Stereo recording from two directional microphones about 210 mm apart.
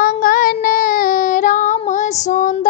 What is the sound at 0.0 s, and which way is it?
Child singing, 40° left (ahead or behind).